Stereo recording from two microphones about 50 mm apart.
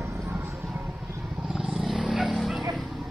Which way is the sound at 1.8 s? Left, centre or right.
Centre.